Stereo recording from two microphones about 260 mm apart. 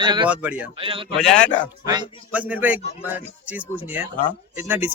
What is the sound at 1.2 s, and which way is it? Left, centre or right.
Speech, centre.